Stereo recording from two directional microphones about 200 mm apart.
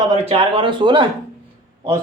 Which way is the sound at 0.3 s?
25° right (ahead or behind).